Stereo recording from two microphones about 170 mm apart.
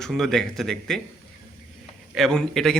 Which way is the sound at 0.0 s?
Centre (ahead or behind).